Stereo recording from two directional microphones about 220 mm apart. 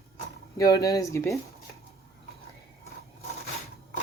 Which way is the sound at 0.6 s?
15° left (ahead or behind).